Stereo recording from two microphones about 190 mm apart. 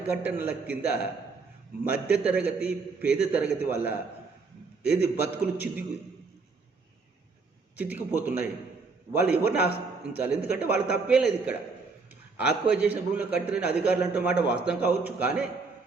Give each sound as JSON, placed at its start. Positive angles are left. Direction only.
{"t": 0.1, "sound": "a man's voice", "side_deg": -10}
{"t": 7.8, "sound": "a man's voice", "side_deg": -10}